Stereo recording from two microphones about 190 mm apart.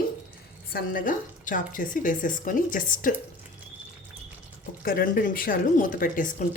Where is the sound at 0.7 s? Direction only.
50° left (ahead or behind).